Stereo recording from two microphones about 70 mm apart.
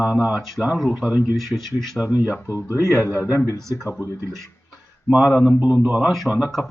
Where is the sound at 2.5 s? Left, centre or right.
Left.